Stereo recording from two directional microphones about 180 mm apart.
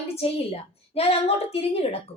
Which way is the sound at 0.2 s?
35° left (ahead or behind).